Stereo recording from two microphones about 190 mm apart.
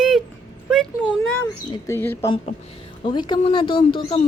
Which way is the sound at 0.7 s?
Centre (ahead or behind).